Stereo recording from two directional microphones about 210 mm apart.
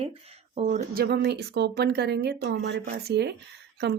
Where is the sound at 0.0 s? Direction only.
30° right (ahead or behind).